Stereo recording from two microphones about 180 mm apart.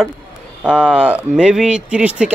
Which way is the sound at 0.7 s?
5° right (ahead or behind).